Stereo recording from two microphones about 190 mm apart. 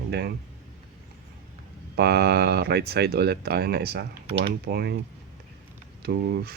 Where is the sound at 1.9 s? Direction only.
55° right (ahead or behind).